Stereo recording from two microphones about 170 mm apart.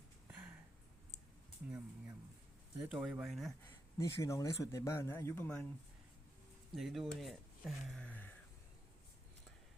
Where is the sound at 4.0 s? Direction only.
20° left (ahead or behind).